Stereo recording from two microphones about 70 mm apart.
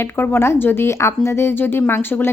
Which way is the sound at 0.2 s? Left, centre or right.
Left.